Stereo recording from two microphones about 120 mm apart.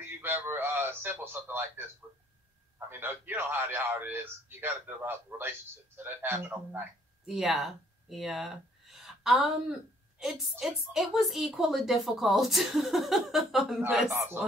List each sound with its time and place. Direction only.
0.0 s a man's voice: 20° right (ahead or behind)
2.9 s a man's voice: 20° right (ahead or behind)
7.2 s a woman's voice: 5° right (ahead or behind)
13.7 s a man's voice: 15° right (ahead or behind)